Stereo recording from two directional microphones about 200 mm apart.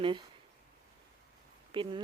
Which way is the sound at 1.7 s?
25° right (ahead or behind).